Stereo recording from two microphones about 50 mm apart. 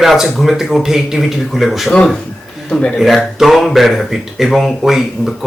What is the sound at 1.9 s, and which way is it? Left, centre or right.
Speech, left.